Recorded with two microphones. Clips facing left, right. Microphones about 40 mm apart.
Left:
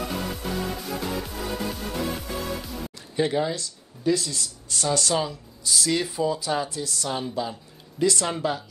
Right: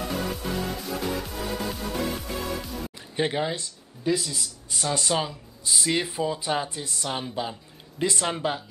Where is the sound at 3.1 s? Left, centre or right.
Right.